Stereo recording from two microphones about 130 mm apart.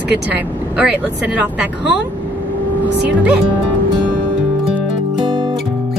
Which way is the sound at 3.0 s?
10° right (ahead or behind).